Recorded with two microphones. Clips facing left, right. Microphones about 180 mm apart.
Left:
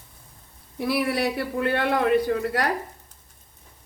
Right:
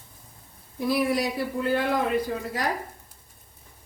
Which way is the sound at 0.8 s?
70° left (ahead or behind).